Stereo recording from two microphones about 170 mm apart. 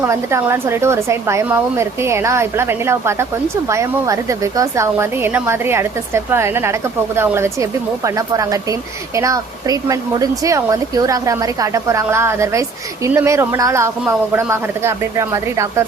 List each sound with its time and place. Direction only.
0.0 s speech: 15° right (ahead or behind)